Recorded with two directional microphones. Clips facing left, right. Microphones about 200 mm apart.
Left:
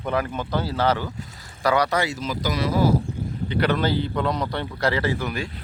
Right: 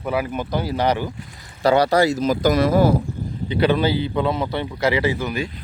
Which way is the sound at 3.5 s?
15° right (ahead or behind).